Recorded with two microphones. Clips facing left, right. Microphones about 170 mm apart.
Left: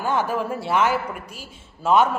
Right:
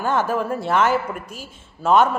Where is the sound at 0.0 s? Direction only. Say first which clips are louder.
Right 2 dB; 10° left (ahead or behind).